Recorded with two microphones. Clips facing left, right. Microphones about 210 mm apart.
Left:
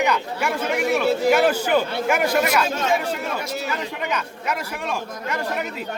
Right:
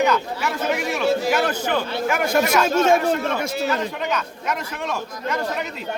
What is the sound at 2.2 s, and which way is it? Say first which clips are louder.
Speech: right 5 dB; 45° right (ahead or behind).